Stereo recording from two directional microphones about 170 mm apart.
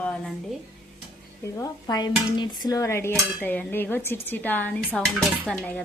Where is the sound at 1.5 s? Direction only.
20° left (ahead or behind).